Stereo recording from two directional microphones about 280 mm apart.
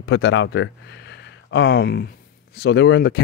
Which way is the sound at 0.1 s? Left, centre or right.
Left.